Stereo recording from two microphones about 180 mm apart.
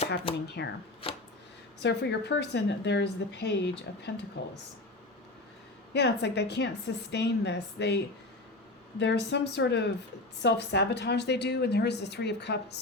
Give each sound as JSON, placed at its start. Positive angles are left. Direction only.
{"t": 0.4, "sound": "a woman's voice", "side_deg": 70}
{"t": 1.0, "sound": "a sound", "side_deg": 30}
{"t": 1.8, "sound": "a woman's voice", "side_deg": 70}
{"t": 5.9, "sound": "a woman's voice", "side_deg": 70}